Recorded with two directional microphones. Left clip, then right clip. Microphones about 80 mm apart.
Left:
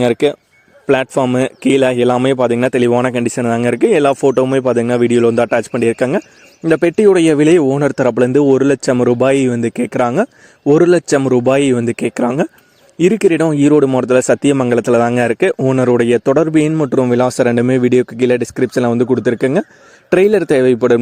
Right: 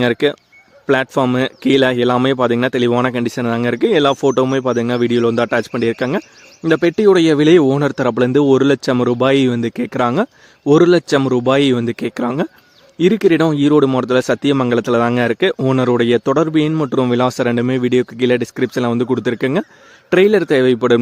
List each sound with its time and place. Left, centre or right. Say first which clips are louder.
0.0 s speech: left 2 dB; centre
11.9 s speech: left 4 dB; left
15.5 s speech: left 2 dB; centre
15.8 s speech: left 2 dB; left
17.2 s speech: left 3 dB; left
20.1 s speech: left 1 dB; left